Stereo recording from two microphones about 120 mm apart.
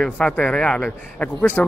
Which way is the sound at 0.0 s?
5° left (ahead or behind).